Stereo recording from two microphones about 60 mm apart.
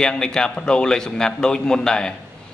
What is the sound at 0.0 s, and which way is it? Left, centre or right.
A man's voice, centre.